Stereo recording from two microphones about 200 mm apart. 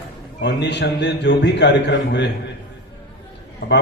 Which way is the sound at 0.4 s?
60° left (ahead or behind).